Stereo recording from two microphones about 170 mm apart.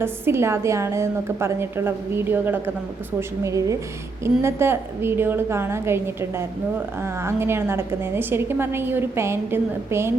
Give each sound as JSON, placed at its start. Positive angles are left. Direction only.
{"t": 0.0, "sound": "a woman's voice", "side_deg": -15}